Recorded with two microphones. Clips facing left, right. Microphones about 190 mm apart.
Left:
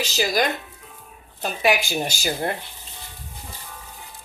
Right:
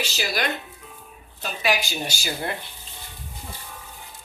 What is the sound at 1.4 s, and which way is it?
Speech, 50° left (ahead or behind).